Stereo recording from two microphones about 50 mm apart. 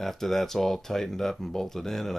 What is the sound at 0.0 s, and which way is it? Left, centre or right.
Speech, centre.